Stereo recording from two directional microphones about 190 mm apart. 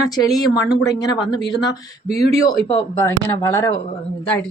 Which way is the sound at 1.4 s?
20° left (ahead or behind).